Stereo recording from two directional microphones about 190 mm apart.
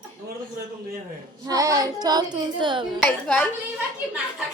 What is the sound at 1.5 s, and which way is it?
Child singing, 20° right (ahead or behind).